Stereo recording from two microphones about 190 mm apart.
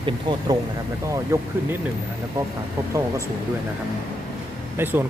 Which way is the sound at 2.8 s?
15° right (ahead or behind).